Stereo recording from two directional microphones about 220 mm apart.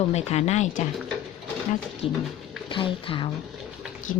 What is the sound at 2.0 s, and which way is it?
Speech, 25° left (ahead or behind).